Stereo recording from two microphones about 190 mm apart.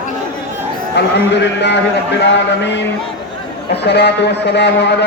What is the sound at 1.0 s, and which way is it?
Speech, 65° left (ahead or behind).